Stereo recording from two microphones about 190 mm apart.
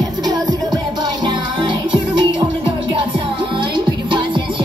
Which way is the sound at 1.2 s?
25° right (ahead or behind).